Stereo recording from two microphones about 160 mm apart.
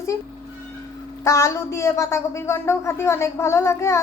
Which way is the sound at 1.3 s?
20° left (ahead or behind).